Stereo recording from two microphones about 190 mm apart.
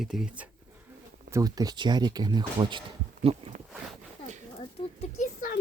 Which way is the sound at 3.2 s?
30° right (ahead or behind).